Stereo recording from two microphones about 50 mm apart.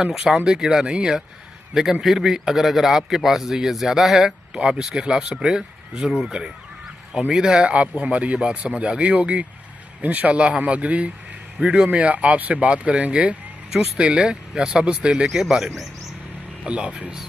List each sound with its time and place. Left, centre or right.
0.0 s a man's voice: centre
7.7 s speech: right
13.7 s speech: centre
15.2 s a man's voice: centre
16.6 s speech: right